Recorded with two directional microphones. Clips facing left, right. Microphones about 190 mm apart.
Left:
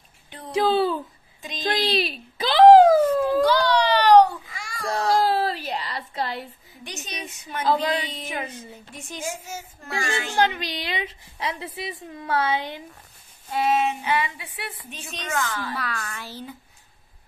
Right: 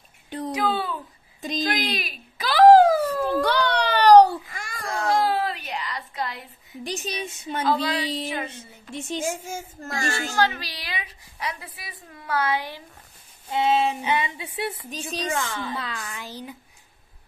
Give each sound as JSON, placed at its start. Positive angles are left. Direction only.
{"t": 0.5, "sound": "speech", "side_deg": 30}
{"t": 1.6, "sound": "a sound", "side_deg": 30}
{"t": 3.4, "sound": "baby cry", "side_deg": -60}
{"t": 4.5, "sound": "a sound", "side_deg": -55}
{"t": 4.8, "sound": "a sound", "side_deg": 30}
{"t": 6.8, "sound": "a woman's voice", "side_deg": -35}
{"t": 9.6, "sound": "a child's voice", "side_deg": -45}
{"t": 10.3, "sound": "a woman's voice", "side_deg": 20}
{"t": 13.5, "sound": "a woman's voice", "side_deg": -25}